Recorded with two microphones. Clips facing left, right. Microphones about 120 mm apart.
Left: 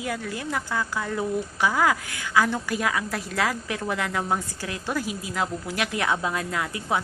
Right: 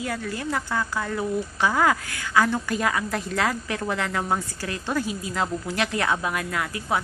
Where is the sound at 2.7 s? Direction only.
5° left (ahead or behind).